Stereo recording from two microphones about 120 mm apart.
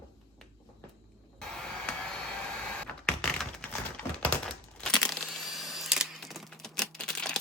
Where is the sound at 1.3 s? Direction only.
5° left (ahead or behind).